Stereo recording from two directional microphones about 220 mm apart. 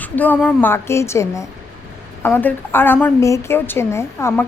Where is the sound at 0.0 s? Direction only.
5° left (ahead or behind).